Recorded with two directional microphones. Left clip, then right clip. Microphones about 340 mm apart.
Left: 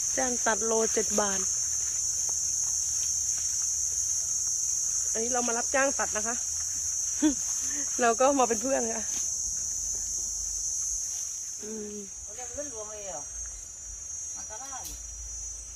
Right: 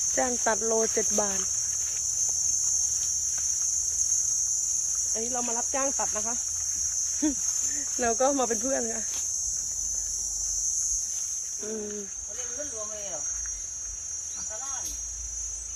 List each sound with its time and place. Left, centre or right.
0.1 s speech: centre
5.1 s speech: centre